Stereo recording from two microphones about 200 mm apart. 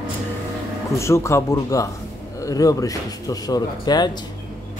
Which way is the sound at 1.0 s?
15° left (ahead or behind).